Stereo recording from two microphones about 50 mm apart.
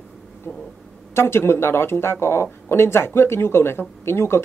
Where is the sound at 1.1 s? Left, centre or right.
Left.